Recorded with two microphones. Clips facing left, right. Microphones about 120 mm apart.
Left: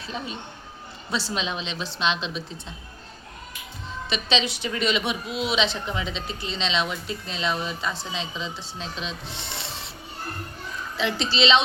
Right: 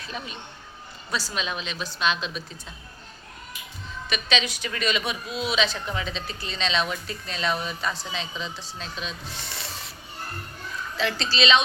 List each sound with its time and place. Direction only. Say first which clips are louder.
0.0 s speech: left 3 dB; 25° left (ahead or behind)
4.1 s speech: left 2 dB; 25° left (ahead or behind)
10.9 s speech: left 1 dB; 20° left (ahead or behind)